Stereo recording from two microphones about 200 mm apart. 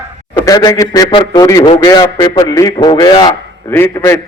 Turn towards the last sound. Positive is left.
turn(degrees=15)  # may be behind; listen again after turning